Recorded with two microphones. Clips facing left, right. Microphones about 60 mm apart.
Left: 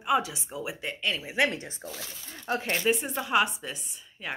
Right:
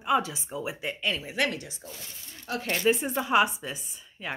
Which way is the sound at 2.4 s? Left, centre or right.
Left.